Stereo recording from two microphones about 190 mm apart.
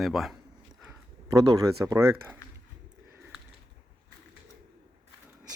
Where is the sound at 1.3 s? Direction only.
15° right (ahead or behind).